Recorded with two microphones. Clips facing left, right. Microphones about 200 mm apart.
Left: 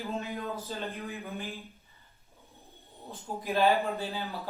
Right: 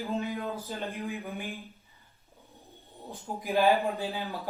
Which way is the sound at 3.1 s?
15° right (ahead or behind).